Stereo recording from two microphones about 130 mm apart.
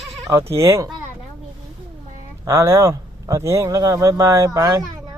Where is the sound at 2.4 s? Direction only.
20° right (ahead or behind).